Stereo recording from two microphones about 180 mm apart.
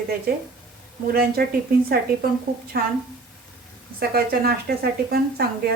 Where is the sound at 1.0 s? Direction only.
60° right (ahead or behind).